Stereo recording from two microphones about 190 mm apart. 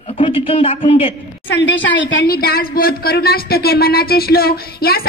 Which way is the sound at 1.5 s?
75° left (ahead or behind).